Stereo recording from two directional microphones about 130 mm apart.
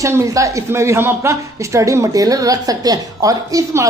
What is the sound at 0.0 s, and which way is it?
Speech, 25° right (ahead or behind).